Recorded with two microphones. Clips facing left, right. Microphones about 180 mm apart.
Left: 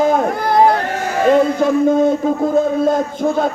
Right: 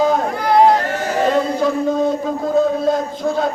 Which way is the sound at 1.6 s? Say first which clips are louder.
Left 4 dB; 50° left (ahead or behind).